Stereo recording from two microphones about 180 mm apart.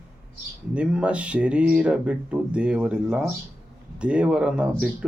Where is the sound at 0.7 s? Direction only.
5° right (ahead or behind).